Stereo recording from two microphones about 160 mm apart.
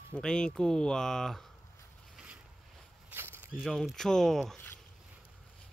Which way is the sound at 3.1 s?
15° right (ahead or behind).